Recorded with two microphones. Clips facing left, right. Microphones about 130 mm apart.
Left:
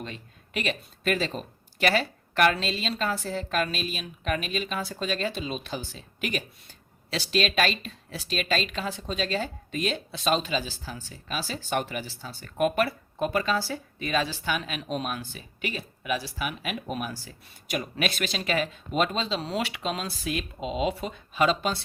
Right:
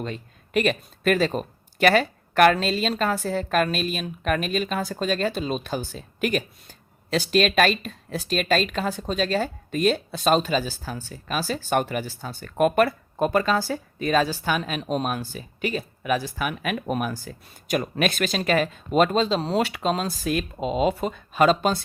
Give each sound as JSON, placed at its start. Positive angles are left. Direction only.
{"t": 0.0, "sound": "speech", "side_deg": -45}